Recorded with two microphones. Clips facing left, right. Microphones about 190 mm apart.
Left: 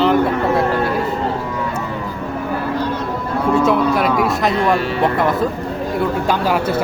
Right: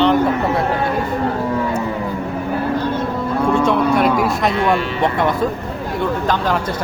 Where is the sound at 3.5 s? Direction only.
5° left (ahead or behind).